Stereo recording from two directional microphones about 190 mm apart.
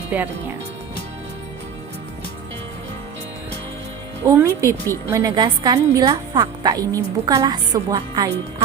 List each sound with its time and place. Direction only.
0.1 s speech: 10° right (ahead or behind)
4.3 s a woman's voice: 15° right (ahead or behind)